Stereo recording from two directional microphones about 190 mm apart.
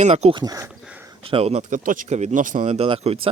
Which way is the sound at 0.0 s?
35° right (ahead or behind).